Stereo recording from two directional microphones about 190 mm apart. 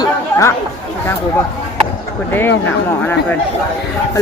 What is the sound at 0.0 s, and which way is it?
Chatter, 15° left (ahead or behind).